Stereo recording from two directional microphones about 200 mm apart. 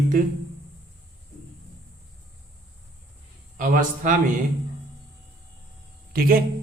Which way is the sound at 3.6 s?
40° right (ahead or behind).